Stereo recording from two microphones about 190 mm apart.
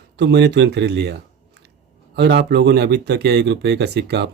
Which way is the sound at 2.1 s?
60° right (ahead or behind).